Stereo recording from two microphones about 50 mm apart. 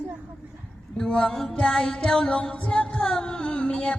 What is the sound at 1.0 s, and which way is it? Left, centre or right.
Music, centre.